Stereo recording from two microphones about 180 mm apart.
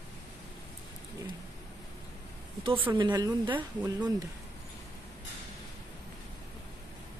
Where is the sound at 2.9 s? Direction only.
25° right (ahead or behind).